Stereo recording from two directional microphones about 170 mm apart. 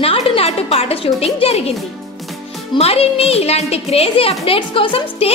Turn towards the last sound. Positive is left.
turn(degrees=30)  # may be behind; listen again after turning